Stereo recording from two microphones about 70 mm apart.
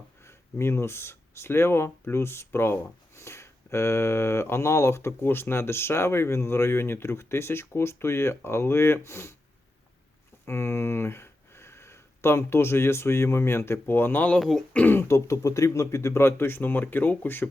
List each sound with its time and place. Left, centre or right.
0.3 s speech: left
10.4 s speech: left; by 14.9 s centre
14.9 s speech: left